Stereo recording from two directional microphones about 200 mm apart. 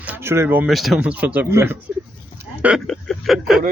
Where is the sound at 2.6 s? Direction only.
Centre (ahead or behind).